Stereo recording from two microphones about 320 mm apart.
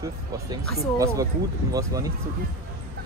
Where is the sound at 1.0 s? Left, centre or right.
Centre.